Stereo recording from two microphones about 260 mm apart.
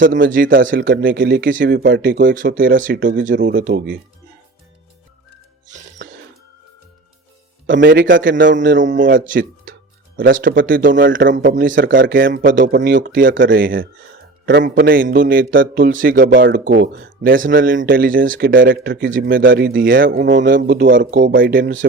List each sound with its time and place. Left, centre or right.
0.0 s speech: right
7.7 s speech: right
12.1 s speech: right
21.0 s speech: right